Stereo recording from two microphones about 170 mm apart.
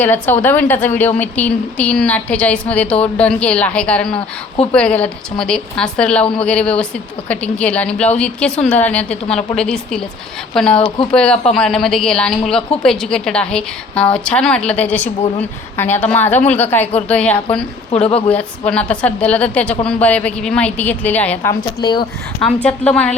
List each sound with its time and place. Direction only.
0.0 s a woman's voice: 10° left (ahead or behind)
10.8 s speech: 30° left (ahead or behind)
11.1 s a woman's voice: 5° left (ahead or behind)
17.9 s speech: 35° left (ahead or behind)
18.3 s a woman's voice: 5° left (ahead or behind)
21.8 s speech: 25° left (ahead or behind)
22.4 s a woman's voice: 5° left (ahead or behind)